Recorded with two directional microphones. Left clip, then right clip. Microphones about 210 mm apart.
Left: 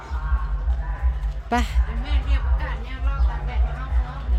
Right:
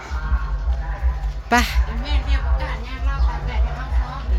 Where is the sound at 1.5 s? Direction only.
Centre (ahead or behind).